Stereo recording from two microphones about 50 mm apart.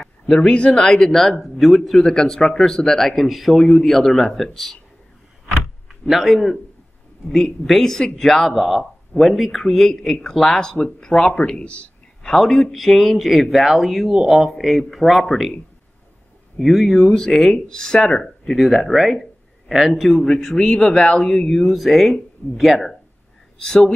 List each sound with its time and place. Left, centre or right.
0.0 s a man's voice: centre
5.9 s speech: centre
8.5 s a man's voice: centre; by 11.8 s left
12.2 s a man's voice: centre
16.5 s speech: centre
18.5 s a man's voice: centre
20.0 s speech: centre
21.3 s a man's voice: centre